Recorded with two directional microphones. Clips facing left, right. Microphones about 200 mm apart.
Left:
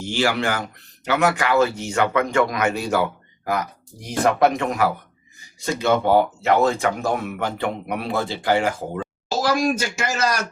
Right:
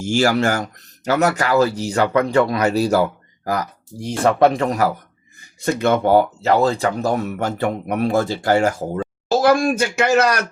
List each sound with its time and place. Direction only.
0.0 s speech: 45° right (ahead or behind)
5.4 s speech: 55° right (ahead or behind)